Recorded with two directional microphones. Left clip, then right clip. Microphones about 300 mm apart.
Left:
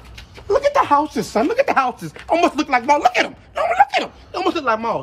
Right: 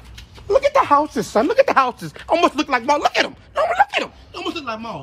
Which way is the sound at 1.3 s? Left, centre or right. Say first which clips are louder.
Right 2 dB; centre.